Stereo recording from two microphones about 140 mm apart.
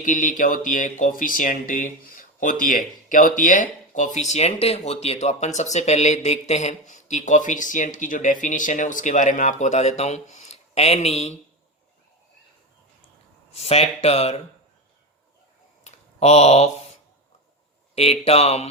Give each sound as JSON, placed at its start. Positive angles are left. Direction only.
{"t": 0.0, "sound": "speech", "side_deg": 65}
{"t": 13.5, "sound": "speech", "side_deg": 45}
{"t": 15.8, "sound": "a sound", "side_deg": 50}
{"t": 17.9, "sound": "speech", "side_deg": 45}